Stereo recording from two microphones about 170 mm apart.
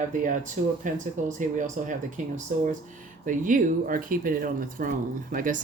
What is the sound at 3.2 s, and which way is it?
Speech, 50° right (ahead or behind).